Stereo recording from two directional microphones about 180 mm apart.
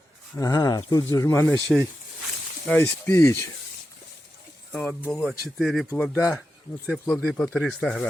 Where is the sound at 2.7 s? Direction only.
10° left (ahead or behind).